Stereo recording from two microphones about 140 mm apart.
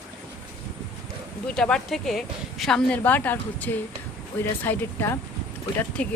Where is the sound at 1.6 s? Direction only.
5° left (ahead or behind).